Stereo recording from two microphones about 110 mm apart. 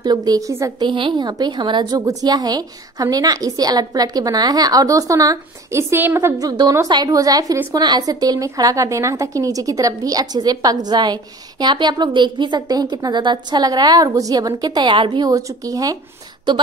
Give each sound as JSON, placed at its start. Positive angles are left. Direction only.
{"t": 0.0, "sound": "a woman's voice", "side_deg": -40}
{"t": 0.7, "sound": "a woman's voice", "side_deg": -50}
{"t": 6.4, "sound": "a woman's voice", "side_deg": -40}